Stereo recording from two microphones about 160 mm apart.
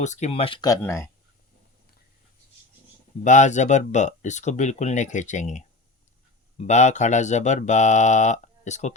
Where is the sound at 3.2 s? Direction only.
50° left (ahead or behind).